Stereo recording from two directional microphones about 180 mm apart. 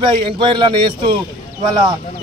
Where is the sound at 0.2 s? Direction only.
25° right (ahead or behind).